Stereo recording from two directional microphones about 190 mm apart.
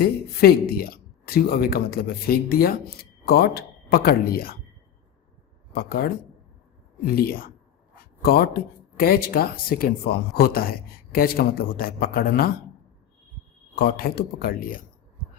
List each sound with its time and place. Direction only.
0.0 s speech: 55° left (ahead or behind)
5.7 s speech: 55° left (ahead or behind)
13.7 s speech: 50° left (ahead or behind)